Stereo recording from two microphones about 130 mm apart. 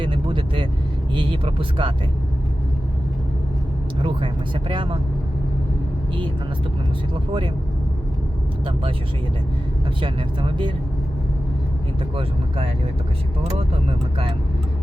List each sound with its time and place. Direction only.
0.0 s vehicle: 40° right (ahead or behind)
1.1 s speech: 40° right (ahead or behind)
4.0 s speech: 40° right (ahead or behind)
7.1 s speech: 40° right (ahead or behind)
10.0 s speech: 40° right (ahead or behind)
12.1 s speech: 45° right (ahead or behind)